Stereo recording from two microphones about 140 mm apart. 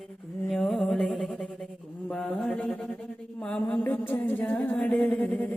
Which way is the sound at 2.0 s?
5° left (ahead or behind).